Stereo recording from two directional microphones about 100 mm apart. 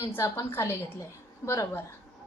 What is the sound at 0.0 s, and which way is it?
A woman's voice, 30° left (ahead or behind).